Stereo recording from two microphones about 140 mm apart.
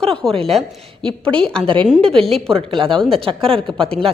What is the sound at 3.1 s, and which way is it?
Speech, 40° right (ahead or behind).